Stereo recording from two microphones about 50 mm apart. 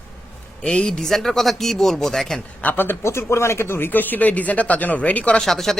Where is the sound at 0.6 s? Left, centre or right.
Centre.